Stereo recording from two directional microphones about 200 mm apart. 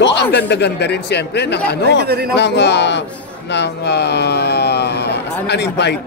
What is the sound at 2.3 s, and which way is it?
Speech, 60° left (ahead or behind).